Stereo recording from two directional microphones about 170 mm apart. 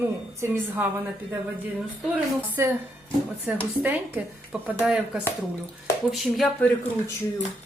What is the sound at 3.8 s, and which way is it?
Speech, 10° right (ahead or behind).